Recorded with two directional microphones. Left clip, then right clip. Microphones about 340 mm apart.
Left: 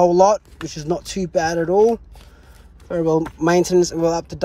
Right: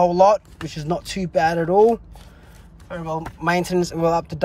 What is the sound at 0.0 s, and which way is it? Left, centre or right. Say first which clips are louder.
Speech: left 1 dB; centre.